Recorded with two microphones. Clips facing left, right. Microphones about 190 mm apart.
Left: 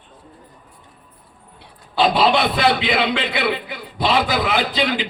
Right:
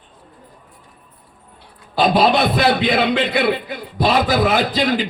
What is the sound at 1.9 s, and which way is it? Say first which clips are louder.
A man's voice: right 2 dB; 45° right (ahead or behind).